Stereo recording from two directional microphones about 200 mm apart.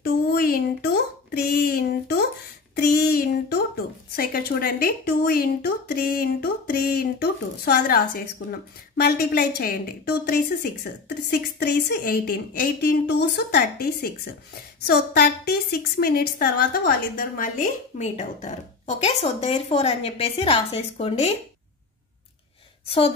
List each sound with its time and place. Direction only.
0.0 s a sound: 50° left (ahead or behind)
2.7 s a woman's voice: 50° left (ahead or behind); by 21.3 s 30° left (ahead or behind)
22.8 s a woman's voice: 30° left (ahead or behind)